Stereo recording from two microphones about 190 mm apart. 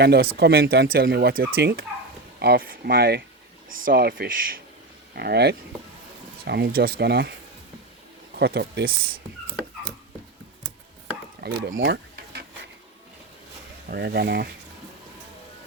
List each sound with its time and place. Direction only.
0.0 s speech: 60° right (ahead or behind)
8.4 s speech: 60° right (ahead or behind)
11.3 s speech: 60° right (ahead or behind)
13.9 s speech: 60° right (ahead or behind)